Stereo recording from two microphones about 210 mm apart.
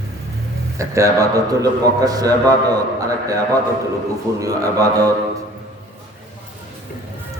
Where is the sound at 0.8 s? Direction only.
15° right (ahead or behind).